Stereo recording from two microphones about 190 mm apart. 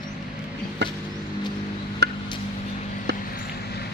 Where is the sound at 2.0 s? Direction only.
60° right (ahead or behind).